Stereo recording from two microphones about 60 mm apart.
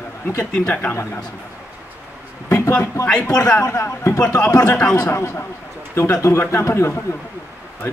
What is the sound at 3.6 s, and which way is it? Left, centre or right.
Speech, left.